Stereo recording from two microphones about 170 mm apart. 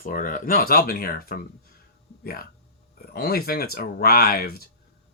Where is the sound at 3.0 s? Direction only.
65° left (ahead or behind).